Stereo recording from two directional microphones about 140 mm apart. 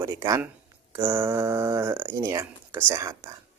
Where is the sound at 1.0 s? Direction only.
15° right (ahead or behind).